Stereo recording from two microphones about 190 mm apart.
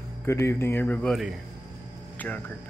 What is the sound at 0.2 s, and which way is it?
Speech, 15° left (ahead or behind).